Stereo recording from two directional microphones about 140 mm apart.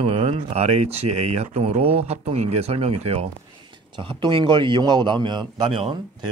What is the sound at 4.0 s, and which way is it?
A man's voice, 35° right (ahead or behind).